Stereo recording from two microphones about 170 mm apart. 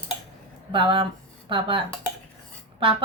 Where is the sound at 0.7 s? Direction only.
30° right (ahead or behind).